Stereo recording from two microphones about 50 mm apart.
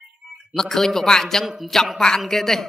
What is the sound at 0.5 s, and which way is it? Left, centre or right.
A man's voice, centre.